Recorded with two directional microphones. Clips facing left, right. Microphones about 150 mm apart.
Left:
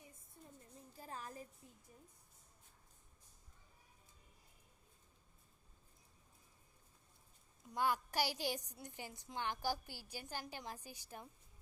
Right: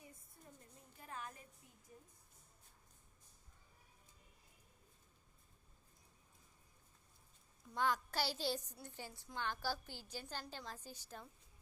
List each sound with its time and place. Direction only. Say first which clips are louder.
0.9 s music: left 1 dB; 35° left (ahead or behind)
7.7 s a woman's voice: left 1 dB; 10° left (ahead or behind)